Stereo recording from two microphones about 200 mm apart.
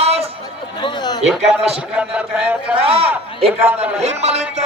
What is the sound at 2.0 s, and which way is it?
Speech, 5° right (ahead or behind).